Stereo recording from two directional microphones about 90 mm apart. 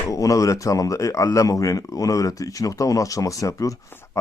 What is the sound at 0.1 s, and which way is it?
Speech, 40° left (ahead or behind).